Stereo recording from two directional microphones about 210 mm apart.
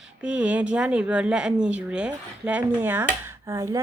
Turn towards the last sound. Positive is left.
turn(degrees=-15)  # may be behind; listen again after turning